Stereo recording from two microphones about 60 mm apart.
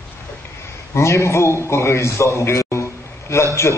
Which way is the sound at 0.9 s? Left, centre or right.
Left.